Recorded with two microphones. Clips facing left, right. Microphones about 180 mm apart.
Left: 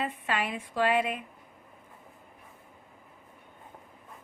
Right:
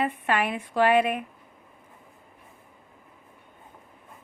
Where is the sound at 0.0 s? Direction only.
65° right (ahead or behind).